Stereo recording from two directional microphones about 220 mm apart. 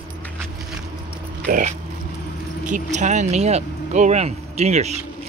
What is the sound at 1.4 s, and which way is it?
Speech, 40° right (ahead or behind).